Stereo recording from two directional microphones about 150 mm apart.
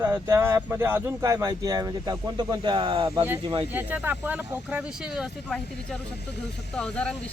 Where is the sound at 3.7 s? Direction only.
10° right (ahead or behind).